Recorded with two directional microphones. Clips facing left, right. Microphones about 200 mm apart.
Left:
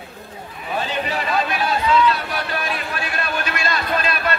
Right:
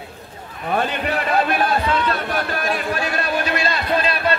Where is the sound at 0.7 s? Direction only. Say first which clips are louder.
Right 3 dB; 60° right (ahead or behind).